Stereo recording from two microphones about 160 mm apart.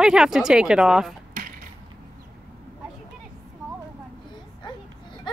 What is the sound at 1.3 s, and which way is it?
Mechanisms, 60° right (ahead or behind).